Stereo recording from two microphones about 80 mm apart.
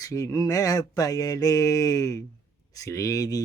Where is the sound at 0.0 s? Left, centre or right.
Left.